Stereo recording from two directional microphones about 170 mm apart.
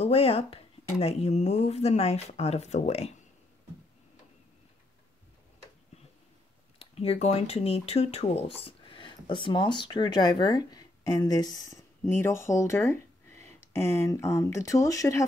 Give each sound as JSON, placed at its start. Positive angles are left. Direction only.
{"t": 0.0, "sound": "speech", "side_deg": 35}
{"t": 6.8, "sound": "speech", "side_deg": 35}